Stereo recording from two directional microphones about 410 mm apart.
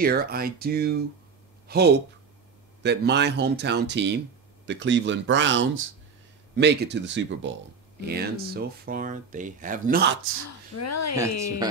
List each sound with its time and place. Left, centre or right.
0.0 s speech: right
10.4 s speech: left